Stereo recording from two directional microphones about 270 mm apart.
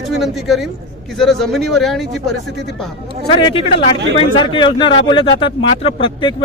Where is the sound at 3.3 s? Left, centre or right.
Centre.